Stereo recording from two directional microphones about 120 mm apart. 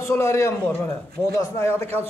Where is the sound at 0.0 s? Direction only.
25° left (ahead or behind).